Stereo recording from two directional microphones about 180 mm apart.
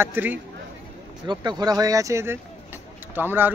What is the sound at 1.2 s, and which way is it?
Speech, 25° right (ahead or behind).